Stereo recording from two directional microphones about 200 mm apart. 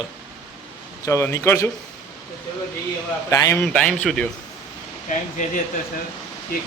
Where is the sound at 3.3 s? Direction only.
15° left (ahead or behind).